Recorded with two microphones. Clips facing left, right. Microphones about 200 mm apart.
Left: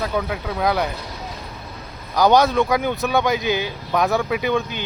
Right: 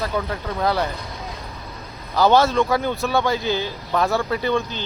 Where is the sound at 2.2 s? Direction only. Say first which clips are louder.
Left 1 dB; 15° left (ahead or behind).